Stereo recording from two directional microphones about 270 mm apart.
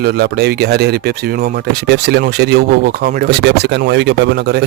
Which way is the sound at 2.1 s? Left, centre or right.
Right.